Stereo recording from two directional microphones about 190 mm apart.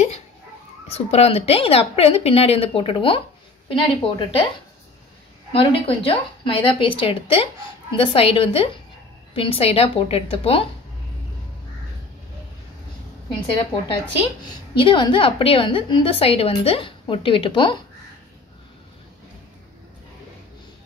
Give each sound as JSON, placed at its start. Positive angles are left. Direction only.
{"t": 0.8, "sound": "a woman's voice", "side_deg": 30}
{"t": 5.5, "sound": "a woman's voice", "side_deg": 30}
{"t": 14.4, "sound": "a woman's voice", "side_deg": 25}